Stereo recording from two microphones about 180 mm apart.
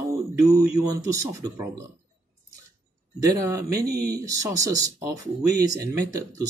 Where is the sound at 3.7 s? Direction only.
60° right (ahead or behind).